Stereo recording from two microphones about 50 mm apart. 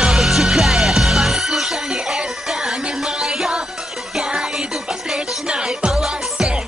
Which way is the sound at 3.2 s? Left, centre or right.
Centre.